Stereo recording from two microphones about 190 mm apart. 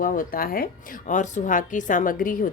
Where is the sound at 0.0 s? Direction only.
45° left (ahead or behind).